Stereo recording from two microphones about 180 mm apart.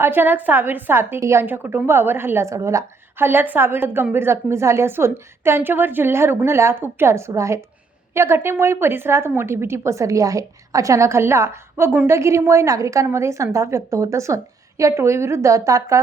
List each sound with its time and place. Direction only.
0.0 s a woman's voice: 10° right (ahead or behind)